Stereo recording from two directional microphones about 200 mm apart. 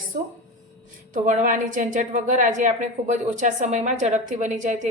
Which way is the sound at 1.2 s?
40° right (ahead or behind).